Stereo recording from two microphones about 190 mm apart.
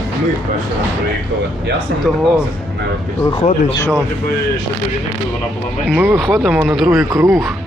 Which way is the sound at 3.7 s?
10° left (ahead or behind).